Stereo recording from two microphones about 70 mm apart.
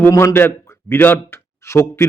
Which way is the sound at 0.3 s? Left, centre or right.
Left.